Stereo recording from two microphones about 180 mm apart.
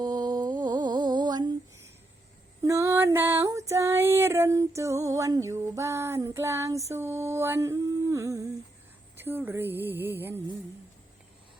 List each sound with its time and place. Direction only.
0.0 s humming: 25° right (ahead or behind)
2.6 s female singing: 15° right (ahead or behind)
9.1 s speech: 10° right (ahead or behind)